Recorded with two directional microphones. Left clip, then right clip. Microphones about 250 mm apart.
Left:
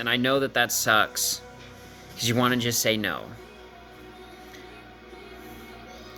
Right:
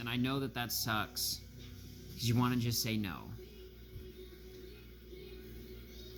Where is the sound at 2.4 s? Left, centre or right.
Centre.